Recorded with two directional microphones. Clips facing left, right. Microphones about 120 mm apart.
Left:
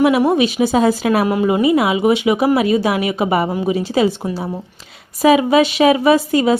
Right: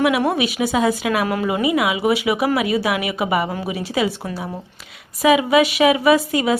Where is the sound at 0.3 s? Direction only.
25° left (ahead or behind).